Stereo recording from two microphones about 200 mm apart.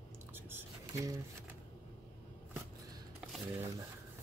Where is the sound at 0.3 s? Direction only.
10° right (ahead or behind).